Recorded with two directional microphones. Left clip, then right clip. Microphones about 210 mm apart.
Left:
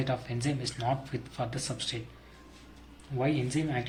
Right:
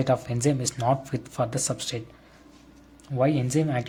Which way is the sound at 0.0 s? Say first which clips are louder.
Right 9 dB; 55° right (ahead or behind).